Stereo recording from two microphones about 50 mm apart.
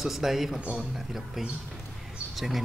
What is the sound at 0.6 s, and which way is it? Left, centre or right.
Speech, right.